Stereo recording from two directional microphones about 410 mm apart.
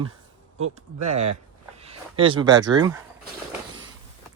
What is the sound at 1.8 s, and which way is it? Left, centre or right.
Speech, centre.